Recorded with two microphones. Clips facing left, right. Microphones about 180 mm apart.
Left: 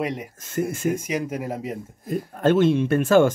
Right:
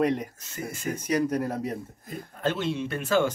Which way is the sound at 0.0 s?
10° left (ahead or behind).